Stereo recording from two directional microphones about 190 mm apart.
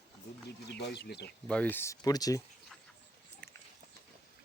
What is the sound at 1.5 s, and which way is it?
Speech, 10° left (ahead or behind).